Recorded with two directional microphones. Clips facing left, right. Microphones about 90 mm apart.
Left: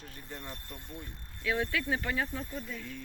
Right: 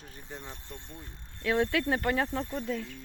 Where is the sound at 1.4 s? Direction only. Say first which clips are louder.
Right 5 dB; 65° right (ahead or behind).